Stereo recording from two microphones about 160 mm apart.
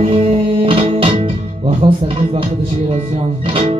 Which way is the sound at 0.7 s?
35° right (ahead or behind).